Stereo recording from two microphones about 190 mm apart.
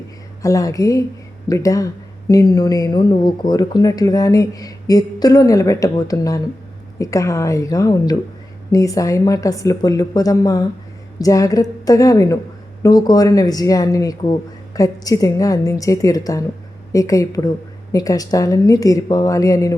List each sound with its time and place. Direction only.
0.4 s speech: 15° left (ahead or behind)